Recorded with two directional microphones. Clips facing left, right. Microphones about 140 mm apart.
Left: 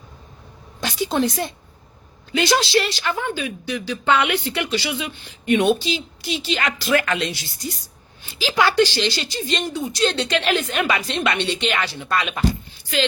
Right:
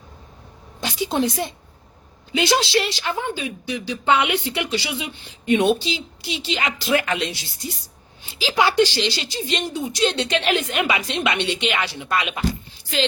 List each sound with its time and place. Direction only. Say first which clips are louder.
0.8 s a woman's voice: left 1 dB; 20° right (ahead or behind)
2.6 s a woman's voice: left 1 dB; 20° right (ahead or behind)
8.3 s a woman's voice: even; 20° right (ahead or behind)